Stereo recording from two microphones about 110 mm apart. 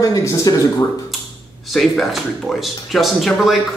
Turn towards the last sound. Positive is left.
turn(degrees=0)  # may be behind; listen again after turning